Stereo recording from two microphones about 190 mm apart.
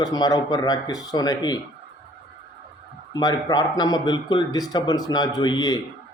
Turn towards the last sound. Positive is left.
turn(degrees=20)  # may be behind; listen again after turning